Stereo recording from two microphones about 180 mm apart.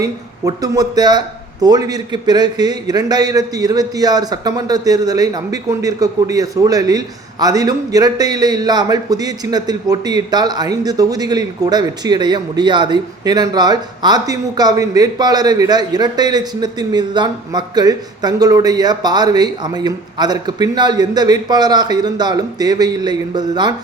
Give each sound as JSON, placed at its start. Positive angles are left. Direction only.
{"t": 0.0, "sound": "a man's voice", "side_deg": -20}